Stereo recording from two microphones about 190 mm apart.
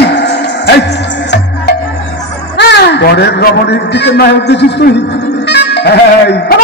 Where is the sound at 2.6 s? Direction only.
65° left (ahead or behind).